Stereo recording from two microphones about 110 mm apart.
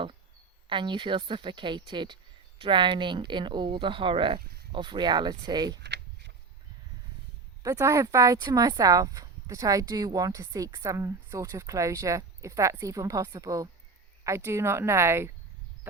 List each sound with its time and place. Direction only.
0.7 s speech: 45° right (ahead or behind)
7.6 s speech: 30° right (ahead or behind)